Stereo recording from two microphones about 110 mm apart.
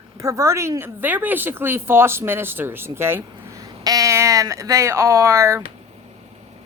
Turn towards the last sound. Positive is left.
turn(degrees=-30)  # may be behind; listen again after turning